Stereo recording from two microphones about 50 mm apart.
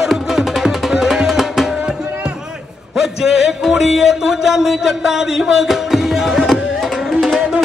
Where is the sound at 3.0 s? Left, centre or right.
Centre.